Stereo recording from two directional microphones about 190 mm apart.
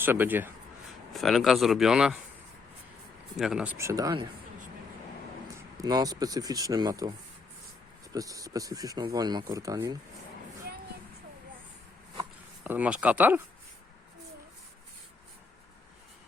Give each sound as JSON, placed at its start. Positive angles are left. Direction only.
{"t": 0.0, "sound": "speech", "side_deg": -10}
{"t": 1.1, "sound": "speech", "side_deg": 0}
{"t": 3.3, "sound": "speech", "side_deg": -5}
{"t": 5.7, "sound": "speech", "side_deg": -20}
{"t": 8.1, "sound": "speech", "side_deg": -20}
{"t": 12.6, "sound": "speech", "side_deg": -10}